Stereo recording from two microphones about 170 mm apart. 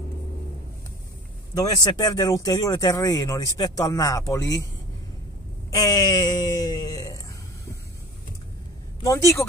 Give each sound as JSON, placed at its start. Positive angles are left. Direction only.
{"t": 1.6, "sound": "speech", "side_deg": 20}
{"t": 5.7, "sound": "speech", "side_deg": 20}
{"t": 9.0, "sound": "speech", "side_deg": 15}